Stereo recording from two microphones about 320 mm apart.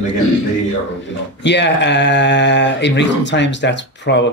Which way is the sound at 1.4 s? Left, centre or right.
Left.